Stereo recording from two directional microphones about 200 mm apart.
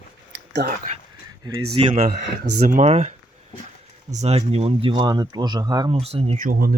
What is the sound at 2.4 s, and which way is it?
Speech, 55° right (ahead or behind).